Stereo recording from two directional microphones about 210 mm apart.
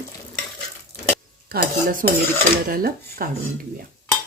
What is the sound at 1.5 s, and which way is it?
Dishes, 45° right (ahead or behind).